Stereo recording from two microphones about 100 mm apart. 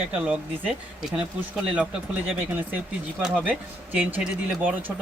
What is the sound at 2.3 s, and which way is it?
Speech, 15° right (ahead or behind).